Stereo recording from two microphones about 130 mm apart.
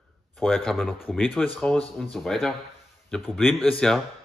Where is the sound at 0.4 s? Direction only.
Centre (ahead or behind).